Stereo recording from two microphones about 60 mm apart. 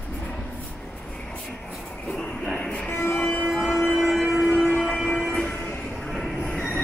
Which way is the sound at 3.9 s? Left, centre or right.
Centre.